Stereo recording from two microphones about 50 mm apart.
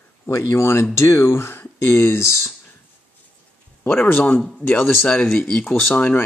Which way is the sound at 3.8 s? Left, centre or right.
Left.